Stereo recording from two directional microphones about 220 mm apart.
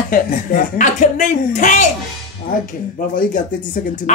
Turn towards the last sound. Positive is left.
turn(degrees=35)  # may be behind; listen again after turning